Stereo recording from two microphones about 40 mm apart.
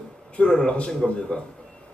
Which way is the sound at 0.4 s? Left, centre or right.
Left.